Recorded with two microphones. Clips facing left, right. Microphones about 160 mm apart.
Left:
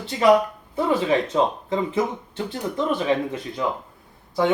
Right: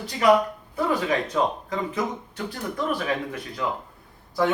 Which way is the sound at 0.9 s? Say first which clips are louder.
Left 4 dB; 25° left (ahead or behind).